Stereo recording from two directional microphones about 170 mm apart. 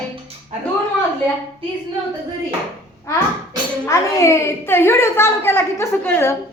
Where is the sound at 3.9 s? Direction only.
20° left (ahead or behind).